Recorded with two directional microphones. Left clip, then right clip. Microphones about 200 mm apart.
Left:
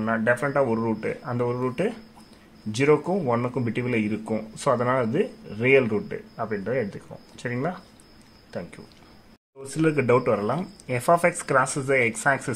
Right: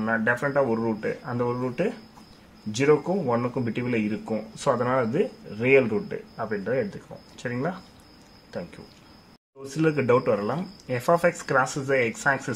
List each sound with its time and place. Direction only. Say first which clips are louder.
0.0 s speech: left 1 dB; 10° left (ahead or behind)
9.7 s speech: left 1 dB; 10° left (ahead or behind)